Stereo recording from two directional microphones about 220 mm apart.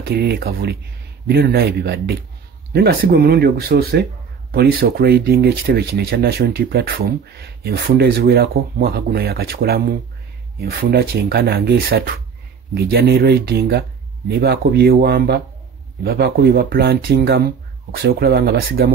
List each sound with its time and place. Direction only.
0.0 s speech: 45° right (ahead or behind)